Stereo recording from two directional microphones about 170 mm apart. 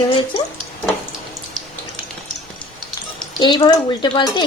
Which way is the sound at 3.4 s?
25° left (ahead or behind).